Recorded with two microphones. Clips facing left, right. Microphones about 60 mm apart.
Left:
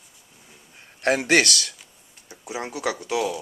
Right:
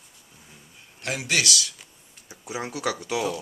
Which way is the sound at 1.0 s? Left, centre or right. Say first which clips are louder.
Left 7 dB; left.